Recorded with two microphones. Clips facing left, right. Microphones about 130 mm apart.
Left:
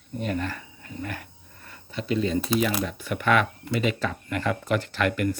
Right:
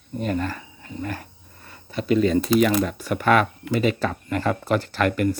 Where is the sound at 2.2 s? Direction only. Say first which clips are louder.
Right 6 dB; 65° right (ahead or behind).